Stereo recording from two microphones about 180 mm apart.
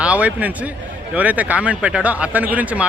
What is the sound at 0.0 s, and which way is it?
A man's voice, 5° right (ahead or behind).